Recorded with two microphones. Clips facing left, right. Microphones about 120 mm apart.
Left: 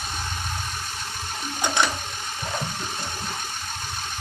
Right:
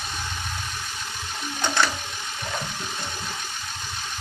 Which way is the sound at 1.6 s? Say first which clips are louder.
Even; 20° left (ahead or behind).